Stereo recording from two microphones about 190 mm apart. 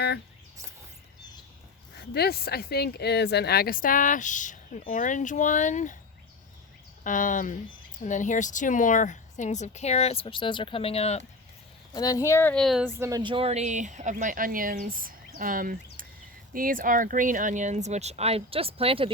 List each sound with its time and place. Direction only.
2.1 s a woman's voice: 55° left (ahead or behind)
7.0 s speech: 45° left (ahead or behind)
11.9 s speech: 20° left (ahead or behind); by 12.8 s centre (ahead or behind)
12.8 s speech: 15° right (ahead or behind)